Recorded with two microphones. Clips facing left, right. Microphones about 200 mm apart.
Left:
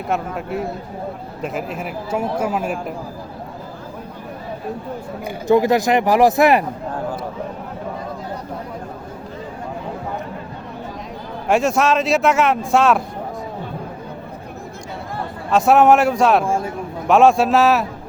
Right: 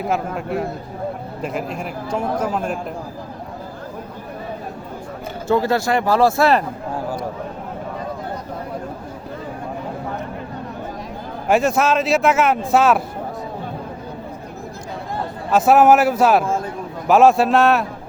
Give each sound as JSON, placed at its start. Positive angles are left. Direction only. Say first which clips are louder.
{"t": 0.1, "sound": "a man's voice", "louder": "left 2 dB", "side_deg": 0}
{"t": 5.5, "sound": "a man's voice", "louder": "left 3 dB", "side_deg": 15}
{"t": 11.4, "sound": "a man's voice", "louder": "even", "side_deg": 0}
{"t": 15.4, "sound": "a man's voice", "louder": "even", "side_deg": 0}